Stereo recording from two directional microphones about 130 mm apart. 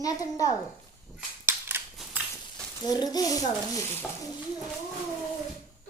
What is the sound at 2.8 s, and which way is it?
Speech, 30° left (ahead or behind).